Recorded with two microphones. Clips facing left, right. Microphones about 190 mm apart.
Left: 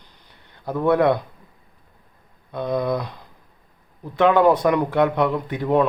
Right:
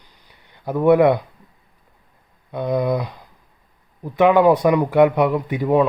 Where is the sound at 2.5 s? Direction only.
15° right (ahead or behind).